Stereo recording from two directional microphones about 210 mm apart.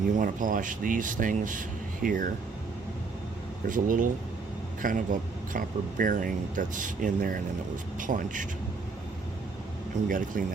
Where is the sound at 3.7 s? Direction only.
40° right (ahead or behind).